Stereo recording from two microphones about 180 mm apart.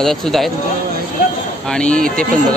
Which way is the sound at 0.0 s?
Centre (ahead or behind).